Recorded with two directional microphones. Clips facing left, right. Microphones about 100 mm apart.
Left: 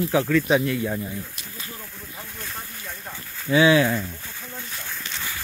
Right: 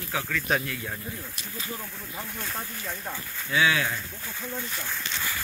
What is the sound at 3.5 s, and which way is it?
Speech, 25° left (ahead or behind).